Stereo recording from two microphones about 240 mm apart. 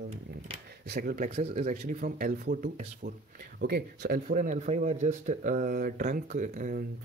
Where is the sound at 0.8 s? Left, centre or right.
Right.